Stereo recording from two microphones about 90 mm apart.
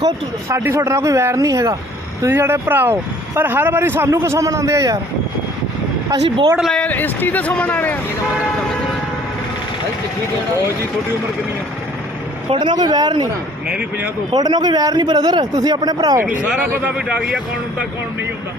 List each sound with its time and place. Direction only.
0.4 s speech: 30° right (ahead or behind)
2.2 s speech: 25° right (ahead or behind)
6.2 s speech: 85° right
6.7 s speech: 20° left (ahead or behind)
12.5 s a man's voice: 55° right (ahead or behind)
13.7 s speech: 10° right (ahead or behind)
14.3 s a man's voice: 50° right (ahead or behind)
16.2 s speech: 15° right (ahead or behind)